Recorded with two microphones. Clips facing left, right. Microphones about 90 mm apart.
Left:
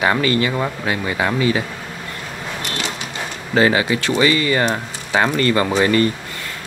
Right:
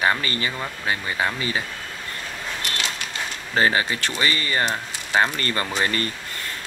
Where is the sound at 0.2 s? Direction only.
35° right (ahead or behind).